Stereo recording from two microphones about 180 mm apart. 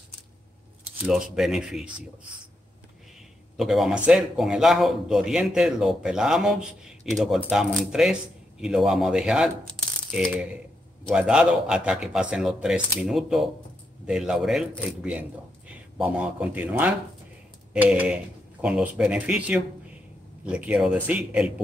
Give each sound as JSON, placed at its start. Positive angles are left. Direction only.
{"t": 1.0, "sound": "a man's voice", "side_deg": -5}
{"t": 3.5, "sound": "a man's voice", "side_deg": 0}